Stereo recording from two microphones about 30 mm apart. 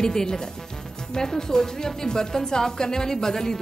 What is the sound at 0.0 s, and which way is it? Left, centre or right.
A woman's voice, left.